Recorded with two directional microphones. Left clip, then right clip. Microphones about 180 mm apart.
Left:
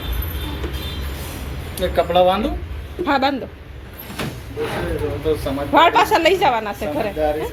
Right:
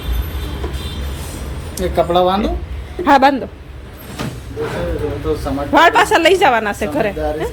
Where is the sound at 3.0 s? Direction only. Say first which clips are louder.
Right 8 dB; 20° right (ahead or behind).